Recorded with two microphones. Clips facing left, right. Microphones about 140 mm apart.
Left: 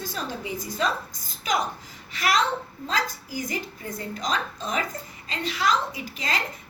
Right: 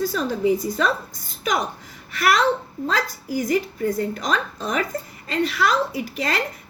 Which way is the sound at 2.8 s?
50° right (ahead or behind).